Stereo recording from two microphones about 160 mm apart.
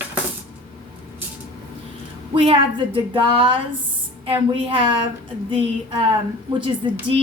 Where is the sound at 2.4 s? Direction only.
35° right (ahead or behind).